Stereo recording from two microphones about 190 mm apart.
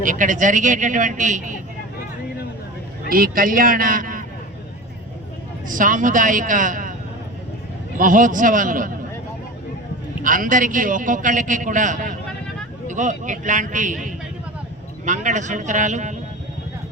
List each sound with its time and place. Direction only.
0.0 s a man's voice: 45° right (ahead or behind)
3.1 s a man's voice: 50° right (ahead or behind)
5.6 s a man's voice: 45° right (ahead or behind)
7.9 s a man's voice: 45° right (ahead or behind)
10.2 s a man's voice: 45° right (ahead or behind)